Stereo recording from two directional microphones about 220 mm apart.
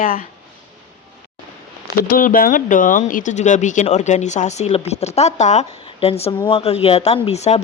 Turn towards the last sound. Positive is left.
turn(degrees=30)  # may be behind; listen again after turning